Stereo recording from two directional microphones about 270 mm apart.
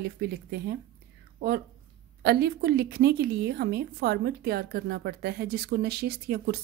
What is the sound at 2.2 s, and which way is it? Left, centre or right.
A woman's voice, right.